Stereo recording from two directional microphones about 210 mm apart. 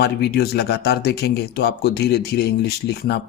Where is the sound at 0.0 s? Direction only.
50° left (ahead or behind).